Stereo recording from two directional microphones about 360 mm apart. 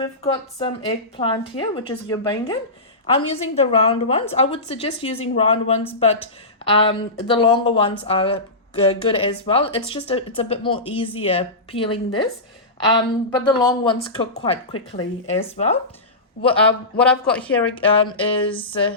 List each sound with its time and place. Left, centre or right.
0.0 s speech: centre
17.0 s speech: centre
17.7 s speech: centre